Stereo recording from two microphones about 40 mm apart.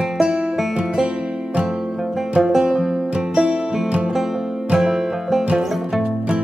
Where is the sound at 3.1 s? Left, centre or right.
Right.